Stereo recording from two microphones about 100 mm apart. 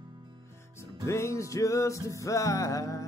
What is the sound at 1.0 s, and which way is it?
Music, 30° left (ahead or behind).